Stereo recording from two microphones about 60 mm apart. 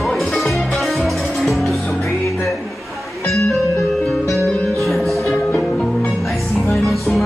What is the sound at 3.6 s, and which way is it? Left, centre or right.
Music, left.